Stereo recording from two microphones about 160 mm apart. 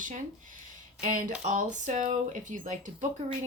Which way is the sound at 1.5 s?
50° right (ahead or behind).